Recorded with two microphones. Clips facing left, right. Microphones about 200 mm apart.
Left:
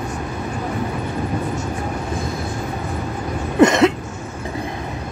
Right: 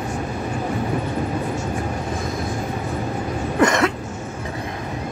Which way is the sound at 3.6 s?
20° left (ahead or behind).